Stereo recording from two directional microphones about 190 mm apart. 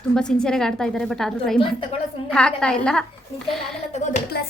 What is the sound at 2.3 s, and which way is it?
A woman's voice, 5° left (ahead or behind).